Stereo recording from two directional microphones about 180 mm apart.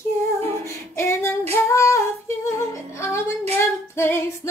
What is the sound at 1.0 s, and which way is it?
Female singing, 15° left (ahead or behind).